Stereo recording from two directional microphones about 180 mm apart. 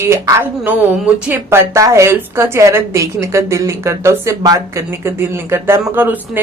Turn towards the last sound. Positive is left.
turn(degrees=-10)  # may be behind; listen again after turning